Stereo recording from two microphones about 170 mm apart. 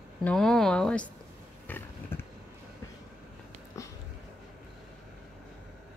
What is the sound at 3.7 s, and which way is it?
Sniff, 20° left (ahead or behind).